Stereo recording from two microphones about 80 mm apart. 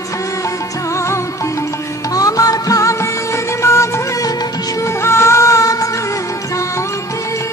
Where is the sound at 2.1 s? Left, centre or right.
Left.